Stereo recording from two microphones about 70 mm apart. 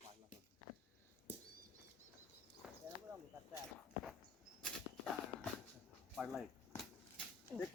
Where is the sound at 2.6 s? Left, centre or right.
Centre.